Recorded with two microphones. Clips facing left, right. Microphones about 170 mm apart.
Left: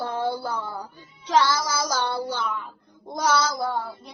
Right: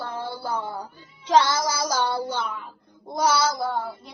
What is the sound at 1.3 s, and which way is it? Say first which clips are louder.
A woman's voice: right 2 dB; 20° right (ahead or behind).